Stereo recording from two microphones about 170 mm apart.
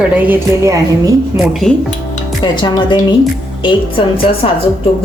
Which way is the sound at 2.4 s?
25° left (ahead or behind).